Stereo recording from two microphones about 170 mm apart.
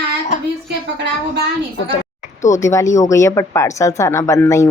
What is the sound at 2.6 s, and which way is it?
A woman's voice, 15° left (ahead or behind).